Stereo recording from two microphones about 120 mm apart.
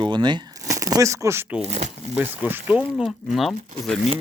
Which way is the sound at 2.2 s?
15° right (ahead or behind).